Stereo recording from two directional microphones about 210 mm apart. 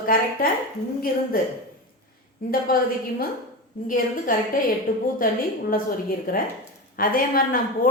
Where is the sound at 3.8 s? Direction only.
40° left (ahead or behind).